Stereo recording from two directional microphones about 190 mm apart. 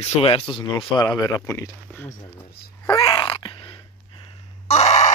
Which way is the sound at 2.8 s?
20° left (ahead or behind).